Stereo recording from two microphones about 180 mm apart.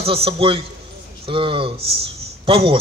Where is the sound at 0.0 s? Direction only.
30° right (ahead or behind).